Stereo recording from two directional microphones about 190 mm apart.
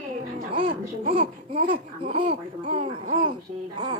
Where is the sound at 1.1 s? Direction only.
30° right (ahead or behind).